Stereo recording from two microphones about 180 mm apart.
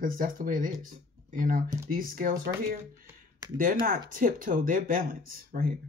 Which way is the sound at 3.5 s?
50° right (ahead or behind).